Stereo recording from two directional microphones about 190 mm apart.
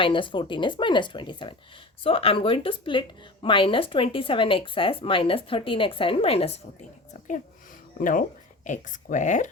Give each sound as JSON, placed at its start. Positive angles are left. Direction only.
{"t": 0.0, "sound": "a woman's voice", "side_deg": 25}
{"t": 7.9, "sound": "speech", "side_deg": 45}